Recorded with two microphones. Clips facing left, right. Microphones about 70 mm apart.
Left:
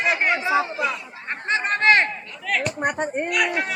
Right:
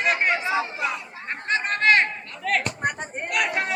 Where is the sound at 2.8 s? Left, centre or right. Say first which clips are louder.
Left 4 dB; left.